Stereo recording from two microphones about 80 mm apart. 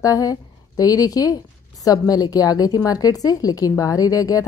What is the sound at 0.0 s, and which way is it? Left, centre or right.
A woman's voice, left.